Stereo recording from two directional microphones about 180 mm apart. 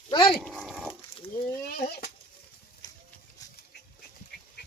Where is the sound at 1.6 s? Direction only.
55° left (ahead or behind).